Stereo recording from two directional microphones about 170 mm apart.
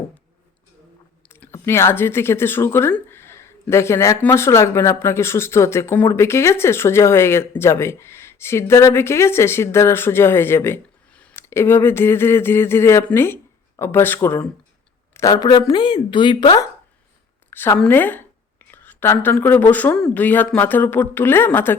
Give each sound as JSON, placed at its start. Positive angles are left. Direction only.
{"t": 1.3, "sound": "a woman's voice", "side_deg": 15}
{"t": 17.5, "sound": "speech", "side_deg": 10}